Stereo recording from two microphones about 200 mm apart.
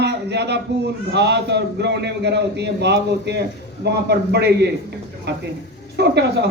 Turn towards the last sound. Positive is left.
turn(degrees=-55)  # may be behind; listen again after turning